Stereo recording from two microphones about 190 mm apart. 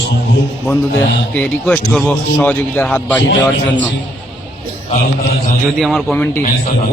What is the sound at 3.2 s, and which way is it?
Speech, 65° left (ahead or behind).